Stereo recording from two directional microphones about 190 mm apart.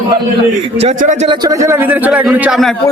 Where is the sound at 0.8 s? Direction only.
40° right (ahead or behind).